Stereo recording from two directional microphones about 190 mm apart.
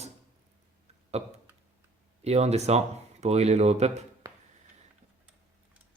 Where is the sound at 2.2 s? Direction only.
35° right (ahead or behind).